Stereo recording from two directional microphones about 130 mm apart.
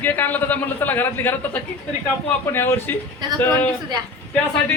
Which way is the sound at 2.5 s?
15° left (ahead or behind).